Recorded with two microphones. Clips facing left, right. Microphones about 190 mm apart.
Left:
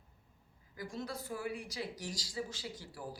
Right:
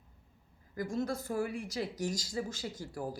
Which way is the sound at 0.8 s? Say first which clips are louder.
Right 8 dB; 45° right (ahead or behind).